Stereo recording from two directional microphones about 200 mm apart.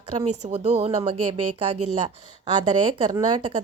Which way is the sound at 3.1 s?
25° right (ahead or behind).